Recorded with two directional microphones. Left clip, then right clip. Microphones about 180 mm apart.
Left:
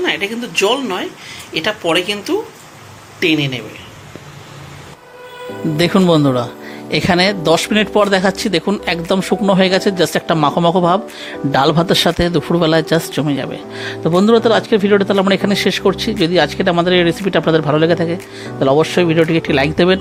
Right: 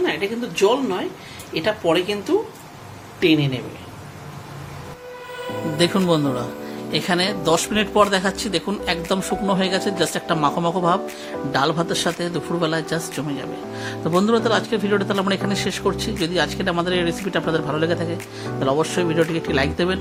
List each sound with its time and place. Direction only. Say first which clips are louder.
0.0 s speech: left 4 dB; 5° left (ahead or behind)
5.7 s speech: left 6 dB; 40° left (ahead or behind)